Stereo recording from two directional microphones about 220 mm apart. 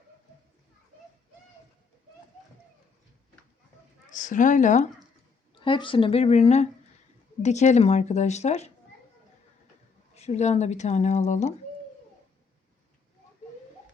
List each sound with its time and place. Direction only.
4.1 s speech: 35° left (ahead or behind)
5.5 s speech: 25° left (ahead or behind)
10.2 s speech: 30° left (ahead or behind)